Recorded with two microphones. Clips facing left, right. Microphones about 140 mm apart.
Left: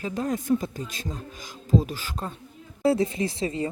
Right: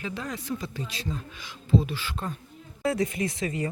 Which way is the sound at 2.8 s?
30° left (ahead or behind).